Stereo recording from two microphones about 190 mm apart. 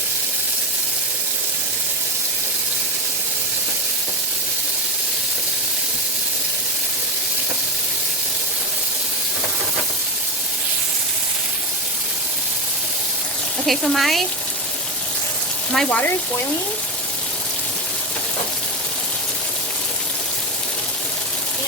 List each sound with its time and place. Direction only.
13.7 s speech: centre (ahead or behind)
15.7 s speech: 5° left (ahead or behind)